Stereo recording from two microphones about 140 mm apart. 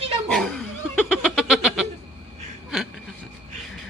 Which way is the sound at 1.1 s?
5° right (ahead or behind).